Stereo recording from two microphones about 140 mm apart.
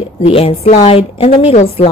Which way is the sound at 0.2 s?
45° left (ahead or behind).